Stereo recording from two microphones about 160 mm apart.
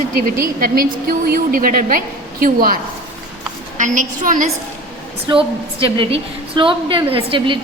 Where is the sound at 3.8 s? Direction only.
55° right (ahead or behind).